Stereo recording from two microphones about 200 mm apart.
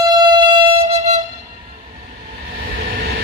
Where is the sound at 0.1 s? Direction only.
20° right (ahead or behind).